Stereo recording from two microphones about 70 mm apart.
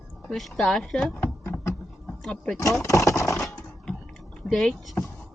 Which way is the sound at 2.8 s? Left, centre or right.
Left.